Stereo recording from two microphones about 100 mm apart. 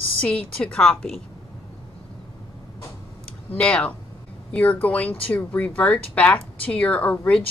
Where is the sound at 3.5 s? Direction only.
10° left (ahead or behind).